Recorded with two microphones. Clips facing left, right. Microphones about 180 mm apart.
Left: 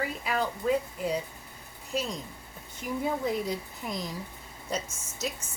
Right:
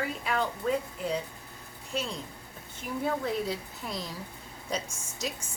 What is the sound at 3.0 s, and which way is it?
Speech, 15° left (ahead or behind).